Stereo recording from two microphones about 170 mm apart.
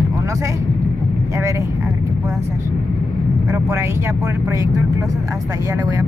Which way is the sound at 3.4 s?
20° right (ahead or behind).